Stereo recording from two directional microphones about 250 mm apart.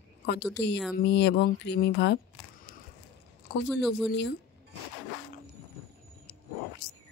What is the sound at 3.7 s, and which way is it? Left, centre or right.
Speech, centre.